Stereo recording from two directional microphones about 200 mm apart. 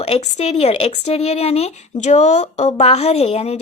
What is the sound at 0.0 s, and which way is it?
Speech, 30° left (ahead or behind).